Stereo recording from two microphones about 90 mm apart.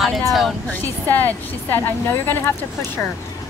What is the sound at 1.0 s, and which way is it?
Speech, 20° left (ahead or behind).